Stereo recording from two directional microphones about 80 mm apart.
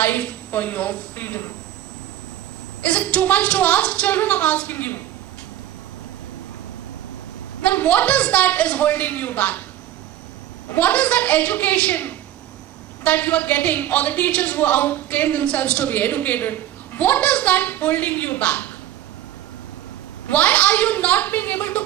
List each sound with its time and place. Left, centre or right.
0.0 s speech: left
2.8 s a woman's voice: centre
7.6 s speech: centre
10.8 s speech: centre
20.3 s speech: centre